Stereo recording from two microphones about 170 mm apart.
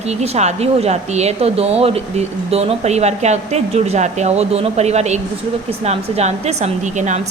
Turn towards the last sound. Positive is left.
turn(degrees=-45)  # may be behind; listen again after turning